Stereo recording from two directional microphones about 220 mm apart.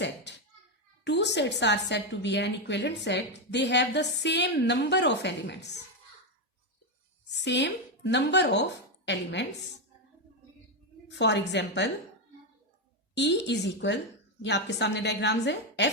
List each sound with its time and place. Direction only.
0.3 s a sound: 50° left (ahead or behind)
1.0 s a woman's voice: 50° left (ahead or behind)
7.3 s speech: 50° left (ahead or behind)
11.1 s a woman's voice: 50° left (ahead or behind)
13.1 s a woman's voice: 50° left (ahead or behind)